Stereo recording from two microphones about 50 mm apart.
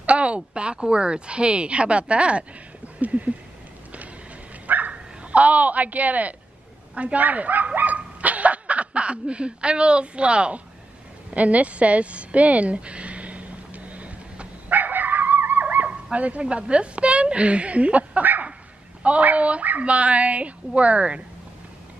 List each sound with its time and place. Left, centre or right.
0.0 s speech: right
4.6 s bow-wow: right
7.0 s speech: right
11.3 s a sound: right
19.0 s speech: right